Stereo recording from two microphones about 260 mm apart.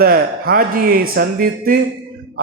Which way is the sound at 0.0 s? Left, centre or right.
Right.